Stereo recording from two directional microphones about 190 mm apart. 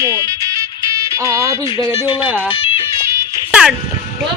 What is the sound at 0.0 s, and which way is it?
Music, 15° right (ahead or behind).